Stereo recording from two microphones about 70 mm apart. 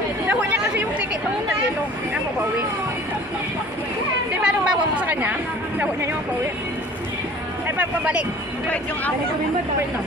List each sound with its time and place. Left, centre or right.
0.3 s chatter: right
4.3 s chatter: centre
7.6 s a sound: right